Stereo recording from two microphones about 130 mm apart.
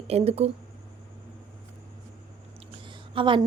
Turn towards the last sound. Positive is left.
turn(degrees=-40)  # may be behind; listen again after turning